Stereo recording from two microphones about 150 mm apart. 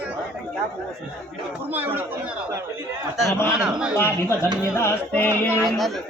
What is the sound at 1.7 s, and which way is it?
Speech, 10° right (ahead or behind).